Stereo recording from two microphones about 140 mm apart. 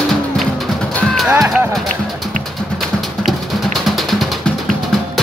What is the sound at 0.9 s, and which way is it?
Music, centre (ahead or behind).